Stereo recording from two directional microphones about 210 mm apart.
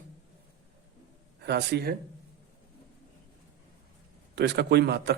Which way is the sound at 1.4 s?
50° right (ahead or behind).